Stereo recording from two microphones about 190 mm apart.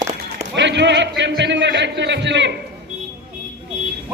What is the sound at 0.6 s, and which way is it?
A man's voice, 70° right (ahead or behind).